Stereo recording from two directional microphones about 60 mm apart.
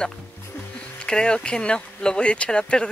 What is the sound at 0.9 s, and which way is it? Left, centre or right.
Speech, centre.